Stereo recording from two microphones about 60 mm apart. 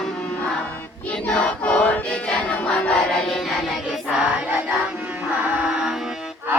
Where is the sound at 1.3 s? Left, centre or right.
Left.